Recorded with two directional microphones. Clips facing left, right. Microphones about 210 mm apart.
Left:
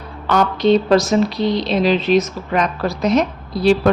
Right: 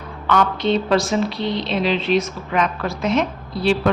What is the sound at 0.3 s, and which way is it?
Speech, 40° left (ahead or behind).